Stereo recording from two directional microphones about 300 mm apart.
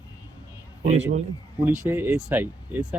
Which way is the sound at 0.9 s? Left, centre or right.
Right.